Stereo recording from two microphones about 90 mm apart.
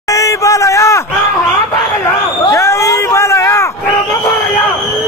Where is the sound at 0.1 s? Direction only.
40° left (ahead or behind).